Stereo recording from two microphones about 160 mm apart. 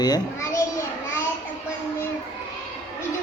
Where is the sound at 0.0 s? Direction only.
25° left (ahead or behind).